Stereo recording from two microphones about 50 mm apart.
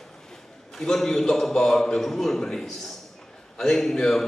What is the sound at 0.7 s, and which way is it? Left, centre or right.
Speech, centre.